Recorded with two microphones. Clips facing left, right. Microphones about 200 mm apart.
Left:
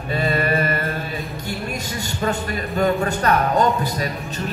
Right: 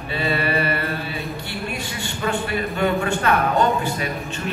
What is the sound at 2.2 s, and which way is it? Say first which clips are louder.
A man's voice: right 1 dB; 40° left (ahead or behind).